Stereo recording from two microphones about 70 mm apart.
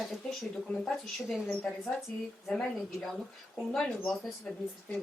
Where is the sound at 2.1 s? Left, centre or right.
Centre.